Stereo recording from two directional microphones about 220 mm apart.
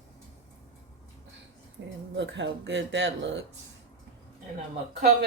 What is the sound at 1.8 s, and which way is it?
Speech, 55° right (ahead or behind).